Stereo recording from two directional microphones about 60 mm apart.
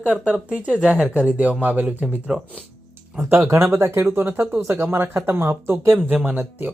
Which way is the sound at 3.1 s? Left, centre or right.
Right.